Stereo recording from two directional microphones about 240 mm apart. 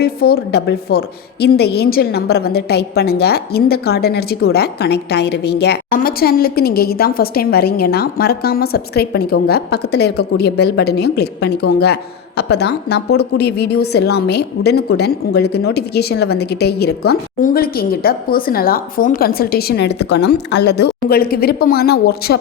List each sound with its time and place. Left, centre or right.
0.0 s a woman's voice: left